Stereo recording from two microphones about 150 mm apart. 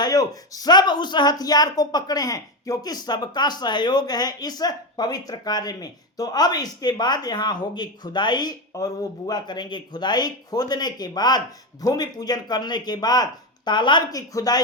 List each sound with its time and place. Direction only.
0.0 s speech: 25° left (ahead or behind)